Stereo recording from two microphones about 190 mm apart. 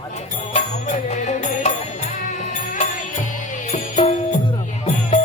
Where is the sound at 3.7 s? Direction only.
35° left (ahead or behind).